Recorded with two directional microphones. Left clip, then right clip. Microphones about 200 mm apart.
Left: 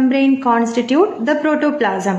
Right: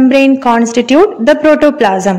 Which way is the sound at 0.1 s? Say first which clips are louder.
Right 6 dB; 35° right (ahead or behind).